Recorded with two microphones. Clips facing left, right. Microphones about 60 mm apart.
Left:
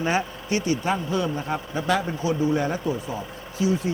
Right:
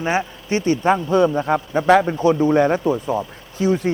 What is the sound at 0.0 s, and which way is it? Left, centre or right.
Speech, right.